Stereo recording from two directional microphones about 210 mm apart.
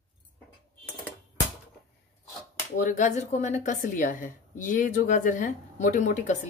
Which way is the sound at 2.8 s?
40° left (ahead or behind).